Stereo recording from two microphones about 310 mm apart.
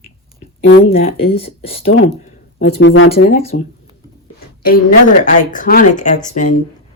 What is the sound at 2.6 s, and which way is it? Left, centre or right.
Speech, left.